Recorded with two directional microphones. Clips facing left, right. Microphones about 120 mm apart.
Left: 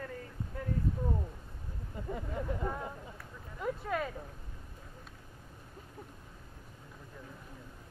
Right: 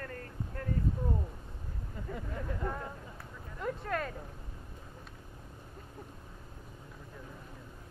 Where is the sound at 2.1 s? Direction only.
15° left (ahead or behind).